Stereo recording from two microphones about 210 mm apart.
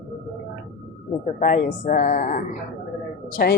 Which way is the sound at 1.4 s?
40° left (ahead or behind).